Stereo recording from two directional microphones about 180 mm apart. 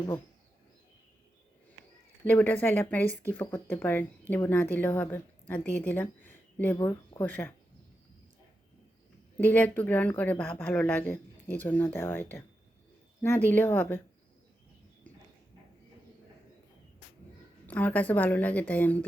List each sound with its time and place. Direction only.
2.2 s speech: 10° left (ahead or behind)
9.4 s speech: 10° left (ahead or behind)
17.7 s speech: 10° left (ahead or behind)